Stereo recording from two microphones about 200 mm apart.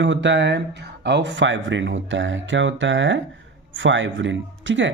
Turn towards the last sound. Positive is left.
turn(degrees=-65)  # may be behind; listen again after turning